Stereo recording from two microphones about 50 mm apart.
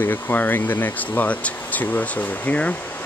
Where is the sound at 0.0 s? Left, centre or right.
Left.